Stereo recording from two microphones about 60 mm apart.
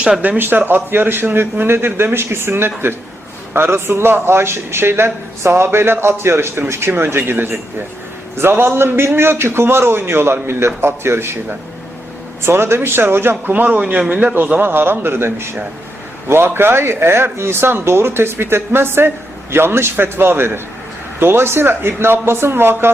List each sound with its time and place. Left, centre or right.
0.0 s a man's voice: right
12.5 s speech: right
13.5 s a man's voice: right
14.3 s speech: right